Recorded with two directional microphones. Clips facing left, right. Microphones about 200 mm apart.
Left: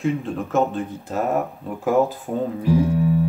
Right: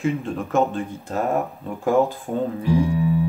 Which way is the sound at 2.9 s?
45° left (ahead or behind).